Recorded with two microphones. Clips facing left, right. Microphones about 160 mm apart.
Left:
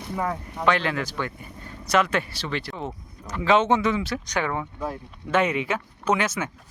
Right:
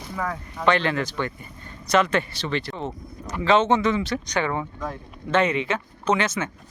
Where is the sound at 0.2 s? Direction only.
25° left (ahead or behind).